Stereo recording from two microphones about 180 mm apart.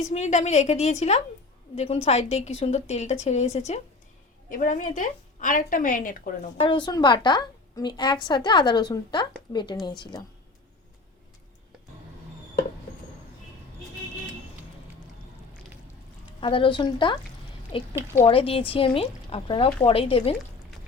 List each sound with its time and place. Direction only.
0.0 s a woman's voice: 40° left (ahead or behind)
6.6 s a woman's voice: 25° left (ahead or behind)
16.4 s a woman's voice: 30° left (ahead or behind)